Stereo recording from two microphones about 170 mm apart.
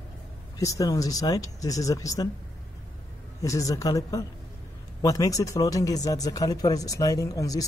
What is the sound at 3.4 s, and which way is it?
Speech, 20° left (ahead or behind).